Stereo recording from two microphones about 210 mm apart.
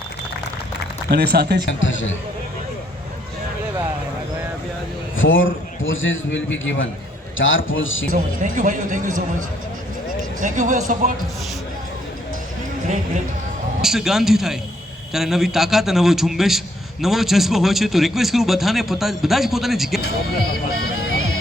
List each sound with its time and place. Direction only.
1.1 s speech: 50° right (ahead or behind)
1.6 s a man's voice: 65° left (ahead or behind)
5.1 s a man's voice: 65° left (ahead or behind)
8.1 s speech: 40° right (ahead or behind)
10.4 s speech: 40° right (ahead or behind)
13.8 s a man's voice: centre (ahead or behind)